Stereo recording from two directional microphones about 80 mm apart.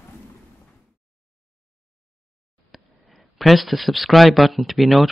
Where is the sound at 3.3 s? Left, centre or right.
Centre.